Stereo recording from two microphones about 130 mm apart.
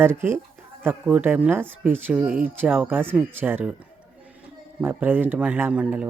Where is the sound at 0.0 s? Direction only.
15° right (ahead or behind).